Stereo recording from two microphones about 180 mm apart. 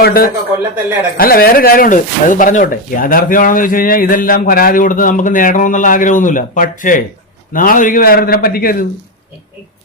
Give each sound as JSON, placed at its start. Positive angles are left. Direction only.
{"t": 0.0, "sound": "a man's voice", "side_deg": 55}